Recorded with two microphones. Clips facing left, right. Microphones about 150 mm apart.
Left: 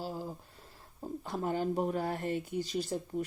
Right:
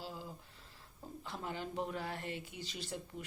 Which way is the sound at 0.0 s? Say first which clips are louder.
Left 8 dB; 40° left (ahead or behind).